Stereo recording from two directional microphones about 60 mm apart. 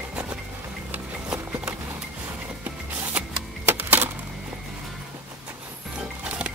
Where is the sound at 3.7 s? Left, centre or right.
Right.